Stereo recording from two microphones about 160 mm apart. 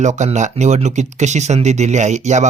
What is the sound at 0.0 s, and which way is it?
Speech, 45° right (ahead or behind).